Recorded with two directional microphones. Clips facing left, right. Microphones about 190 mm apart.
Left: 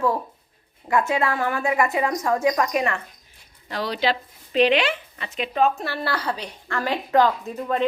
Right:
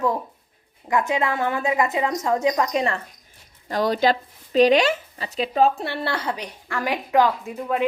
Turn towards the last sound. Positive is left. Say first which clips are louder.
# even
turn(degrees=-10)  # may be behind; listen again after turning